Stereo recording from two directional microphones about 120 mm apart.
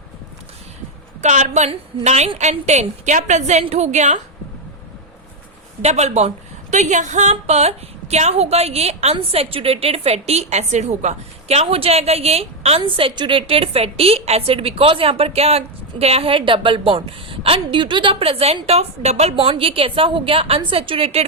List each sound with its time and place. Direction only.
1.2 s a woman's voice: 80° right
2.0 s a woman's voice: 65° right (ahead or behind)
3.6 s a woman's voice: 60° right (ahead or behind)
5.8 s a woman's voice: 65° right (ahead or behind)
9.3 s a woman's voice: 50° right (ahead or behind)
12.8 s a woman's voice: 45° right (ahead or behind)